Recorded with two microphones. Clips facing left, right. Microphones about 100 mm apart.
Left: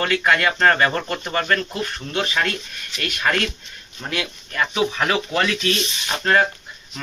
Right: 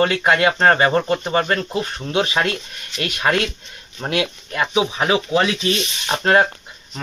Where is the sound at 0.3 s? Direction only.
20° right (ahead or behind).